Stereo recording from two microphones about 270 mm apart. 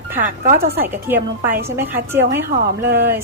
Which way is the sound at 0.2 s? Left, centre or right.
Right.